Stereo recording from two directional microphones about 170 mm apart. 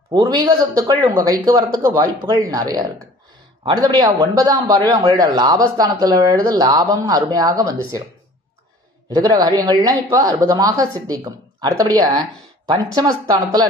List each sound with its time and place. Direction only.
0.1 s speech: 25° right (ahead or behind)
9.1 s speech: 25° right (ahead or behind)